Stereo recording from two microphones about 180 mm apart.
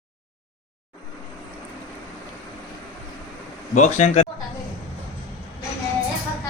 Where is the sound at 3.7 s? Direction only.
40° left (ahead or behind).